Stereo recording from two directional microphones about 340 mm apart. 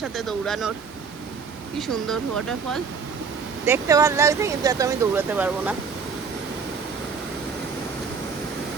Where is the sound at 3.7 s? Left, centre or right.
Centre.